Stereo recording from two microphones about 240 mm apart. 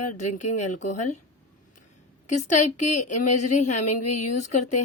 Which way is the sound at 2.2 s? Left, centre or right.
Left.